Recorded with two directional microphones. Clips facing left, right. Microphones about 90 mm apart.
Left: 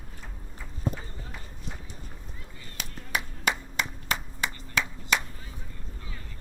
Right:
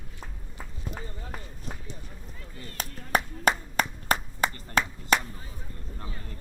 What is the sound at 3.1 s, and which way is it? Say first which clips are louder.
Clapping: right 5 dB; 40° right (ahead or behind).